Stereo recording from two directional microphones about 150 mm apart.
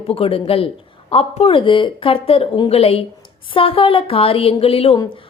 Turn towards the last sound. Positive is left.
turn(degrees=40)  # may be behind; listen again after turning